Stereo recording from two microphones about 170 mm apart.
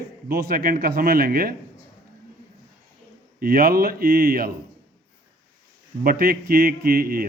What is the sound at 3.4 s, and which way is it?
A man's voice, 60° right (ahead or behind).